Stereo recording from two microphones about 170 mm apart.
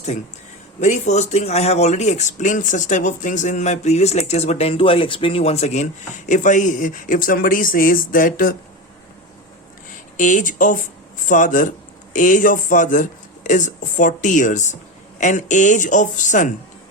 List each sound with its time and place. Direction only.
0.8 s speech: 45° left (ahead or behind)
10.2 s speech: 45° left (ahead or behind)